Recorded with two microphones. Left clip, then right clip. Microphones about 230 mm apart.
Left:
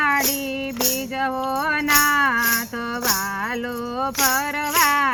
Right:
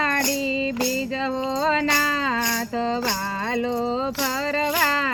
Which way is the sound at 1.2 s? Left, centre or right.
Centre.